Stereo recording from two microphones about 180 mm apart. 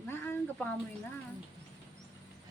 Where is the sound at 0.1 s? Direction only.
10° left (ahead or behind).